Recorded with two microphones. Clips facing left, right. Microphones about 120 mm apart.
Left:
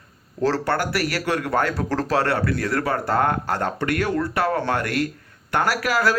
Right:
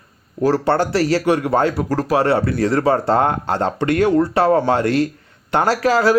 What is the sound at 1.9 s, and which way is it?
Speech, 10° right (ahead or behind).